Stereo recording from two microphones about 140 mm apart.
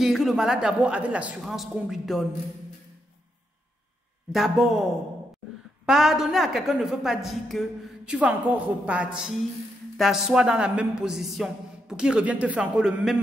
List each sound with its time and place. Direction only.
0.0 s a woman's voice: centre (ahead or behind)
4.3 s a woman's voice: centre (ahead or behind)
5.9 s a woman's voice: 5° right (ahead or behind)